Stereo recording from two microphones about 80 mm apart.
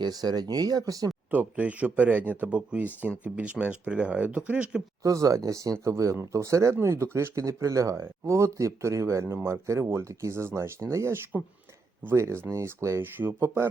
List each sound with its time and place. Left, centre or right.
0.0 s speech: right
1.3 s speech: centre
5.0 s speech: right